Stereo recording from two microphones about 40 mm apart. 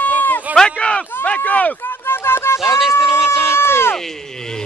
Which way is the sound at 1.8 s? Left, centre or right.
Left.